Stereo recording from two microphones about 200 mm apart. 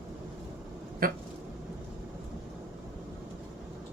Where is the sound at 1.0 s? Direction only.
45° right (ahead or behind).